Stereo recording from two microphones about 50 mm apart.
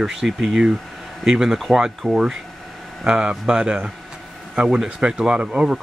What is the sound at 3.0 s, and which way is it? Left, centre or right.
Speech, centre.